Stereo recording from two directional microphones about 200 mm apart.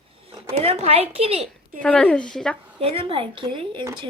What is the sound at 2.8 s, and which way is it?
Speech, 25° right (ahead or behind).